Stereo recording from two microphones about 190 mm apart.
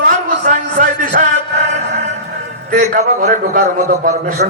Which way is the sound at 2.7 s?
45° right (ahead or behind).